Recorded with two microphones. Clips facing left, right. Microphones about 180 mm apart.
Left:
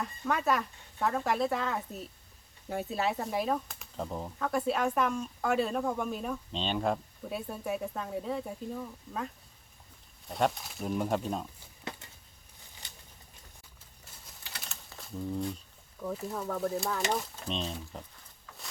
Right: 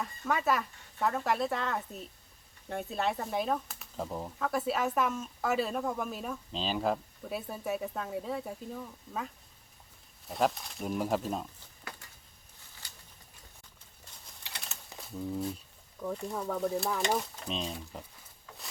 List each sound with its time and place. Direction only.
0.0 s speech: centre (ahead or behind)
12.8 s pigeon: 20° left (ahead or behind)
15.0 s speech: 5° right (ahead or behind)